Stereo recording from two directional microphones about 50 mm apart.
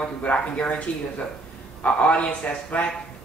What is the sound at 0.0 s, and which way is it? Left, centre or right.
A woman's voice, left.